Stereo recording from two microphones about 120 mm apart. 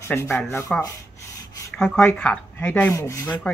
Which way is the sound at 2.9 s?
25° left (ahead or behind).